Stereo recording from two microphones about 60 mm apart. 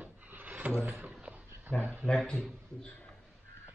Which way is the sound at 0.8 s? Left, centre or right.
Right.